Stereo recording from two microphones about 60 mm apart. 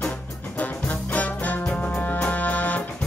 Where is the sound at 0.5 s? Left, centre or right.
Left.